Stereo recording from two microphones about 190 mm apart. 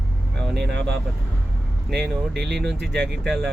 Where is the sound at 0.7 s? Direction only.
65° right (ahead or behind).